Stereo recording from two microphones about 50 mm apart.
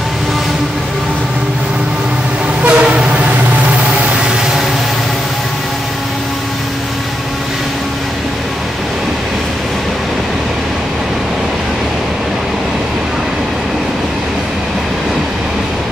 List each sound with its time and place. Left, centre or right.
2.6 s train: right